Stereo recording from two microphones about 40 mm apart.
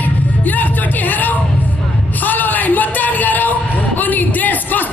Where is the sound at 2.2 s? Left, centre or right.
Left.